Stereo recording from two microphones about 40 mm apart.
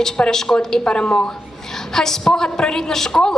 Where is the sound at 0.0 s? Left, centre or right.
Centre.